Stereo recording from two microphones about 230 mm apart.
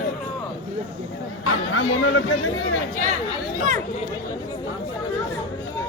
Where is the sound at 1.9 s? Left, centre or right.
Left.